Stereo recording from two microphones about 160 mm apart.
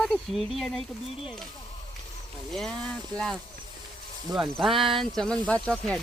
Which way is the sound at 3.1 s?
5° left (ahead or behind).